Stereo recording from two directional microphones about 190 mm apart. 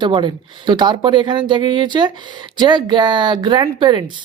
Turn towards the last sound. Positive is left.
turn(degrees=-25)  # may be behind; listen again after turning